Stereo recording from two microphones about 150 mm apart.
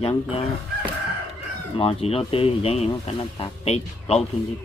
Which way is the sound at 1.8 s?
40° left (ahead or behind).